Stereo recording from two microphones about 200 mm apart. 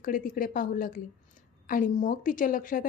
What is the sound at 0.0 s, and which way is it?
A woman's voice, 45° left (ahead or behind).